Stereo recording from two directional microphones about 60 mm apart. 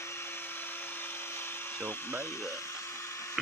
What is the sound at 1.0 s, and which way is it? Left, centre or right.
Dental drill, left.